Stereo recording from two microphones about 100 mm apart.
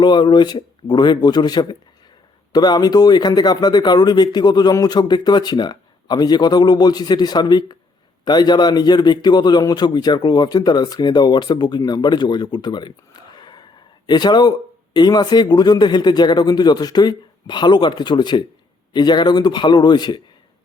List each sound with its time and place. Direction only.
0.0 s speech: 50° left (ahead or behind)